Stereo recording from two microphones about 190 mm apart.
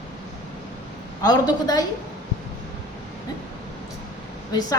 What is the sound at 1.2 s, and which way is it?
Speech, 20° left (ahead or behind).